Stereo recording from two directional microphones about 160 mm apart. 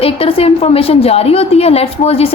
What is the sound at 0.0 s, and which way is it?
A woman's voice, 35° left (ahead or behind).